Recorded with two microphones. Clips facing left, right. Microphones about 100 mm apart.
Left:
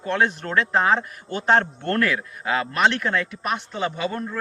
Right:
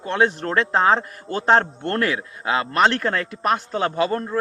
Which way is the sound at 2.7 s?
35° right (ahead or behind).